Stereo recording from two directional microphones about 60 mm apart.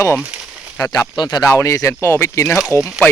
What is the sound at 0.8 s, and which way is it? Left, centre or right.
Speech, left.